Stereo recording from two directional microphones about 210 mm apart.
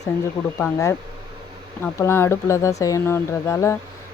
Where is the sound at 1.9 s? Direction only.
10° left (ahead or behind).